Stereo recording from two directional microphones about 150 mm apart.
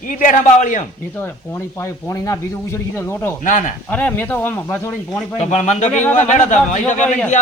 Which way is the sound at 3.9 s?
10° left (ahead or behind).